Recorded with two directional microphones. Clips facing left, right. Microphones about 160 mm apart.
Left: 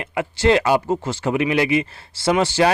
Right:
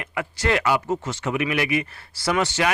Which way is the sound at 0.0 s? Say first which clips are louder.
Left 7 dB; 25° left (ahead or behind).